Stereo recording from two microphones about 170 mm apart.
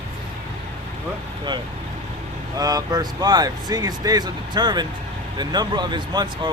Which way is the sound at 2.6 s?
20° right (ahead or behind).